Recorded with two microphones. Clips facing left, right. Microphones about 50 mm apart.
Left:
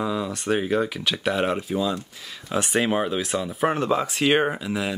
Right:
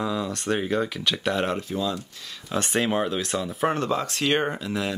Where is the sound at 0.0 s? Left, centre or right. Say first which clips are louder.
Left 1 dB; centre.